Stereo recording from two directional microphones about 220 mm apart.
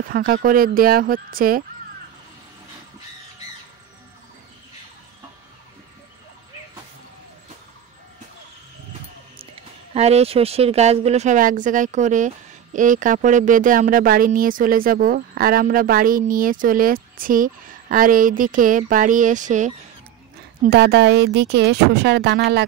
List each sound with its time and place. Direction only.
0.1 s speech: 40° right (ahead or behind)
9.9 s speech: 30° right (ahead or behind)
20.6 s speech: 50° right (ahead or behind)